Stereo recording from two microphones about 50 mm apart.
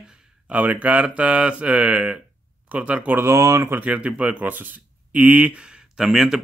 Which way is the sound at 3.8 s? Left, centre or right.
Right.